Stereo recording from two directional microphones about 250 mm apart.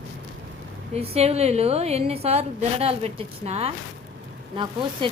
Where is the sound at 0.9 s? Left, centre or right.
Right.